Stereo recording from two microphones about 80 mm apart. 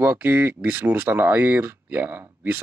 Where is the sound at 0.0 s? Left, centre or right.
Right.